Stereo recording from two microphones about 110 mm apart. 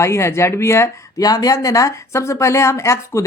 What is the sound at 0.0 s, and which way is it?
Speech, 25° left (ahead or behind).